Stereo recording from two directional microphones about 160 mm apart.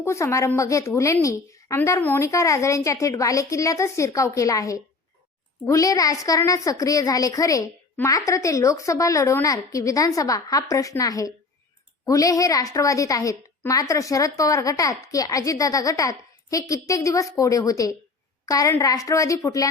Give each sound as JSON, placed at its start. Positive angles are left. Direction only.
{"t": 0.0, "sound": "a woman's voice", "side_deg": 15}